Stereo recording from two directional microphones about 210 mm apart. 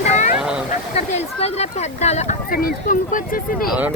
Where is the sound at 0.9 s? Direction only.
30° left (ahead or behind).